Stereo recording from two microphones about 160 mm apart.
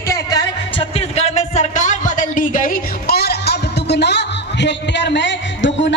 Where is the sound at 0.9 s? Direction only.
45° left (ahead or behind); by 5.3 s 90° left.